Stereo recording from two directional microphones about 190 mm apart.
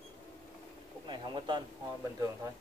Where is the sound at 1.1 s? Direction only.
25° right (ahead or behind).